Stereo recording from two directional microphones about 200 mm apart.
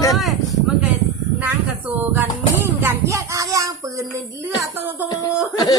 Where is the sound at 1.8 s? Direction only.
10° right (ahead or behind).